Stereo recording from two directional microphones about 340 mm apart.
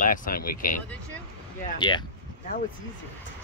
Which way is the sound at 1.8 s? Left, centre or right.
Centre.